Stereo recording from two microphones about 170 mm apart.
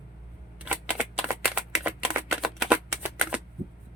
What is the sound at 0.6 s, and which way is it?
Shuffling cards, 5° right (ahead or behind).